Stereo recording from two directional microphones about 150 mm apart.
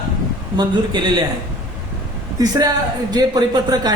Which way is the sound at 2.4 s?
25° right (ahead or behind).